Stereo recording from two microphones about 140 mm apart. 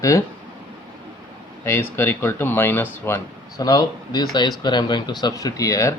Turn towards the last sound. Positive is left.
turn(degrees=25)  # may be behind; listen again after turning